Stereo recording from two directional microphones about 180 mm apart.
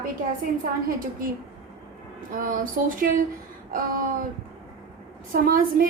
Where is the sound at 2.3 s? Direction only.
50° right (ahead or behind).